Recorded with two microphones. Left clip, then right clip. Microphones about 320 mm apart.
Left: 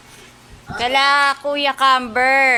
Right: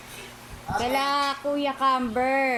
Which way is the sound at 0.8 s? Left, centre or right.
Left.